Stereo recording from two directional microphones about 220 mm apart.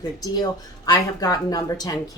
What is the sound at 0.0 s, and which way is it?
Speech, 20° left (ahead or behind).